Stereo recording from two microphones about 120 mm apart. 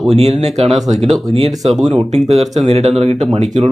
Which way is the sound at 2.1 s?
65° right (ahead or behind).